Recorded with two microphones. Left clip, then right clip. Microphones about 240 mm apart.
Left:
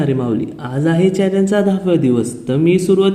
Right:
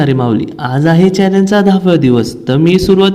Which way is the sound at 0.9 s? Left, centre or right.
Right.